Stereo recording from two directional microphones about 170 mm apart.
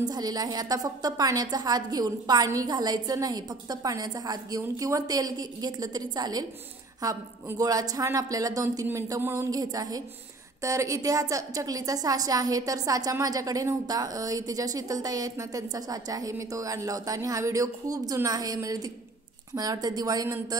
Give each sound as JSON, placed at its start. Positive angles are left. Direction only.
{"t": 0.0, "sound": "a woman's voice", "side_deg": -25}